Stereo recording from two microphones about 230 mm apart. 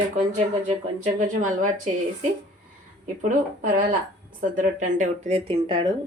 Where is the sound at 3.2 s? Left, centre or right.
Right.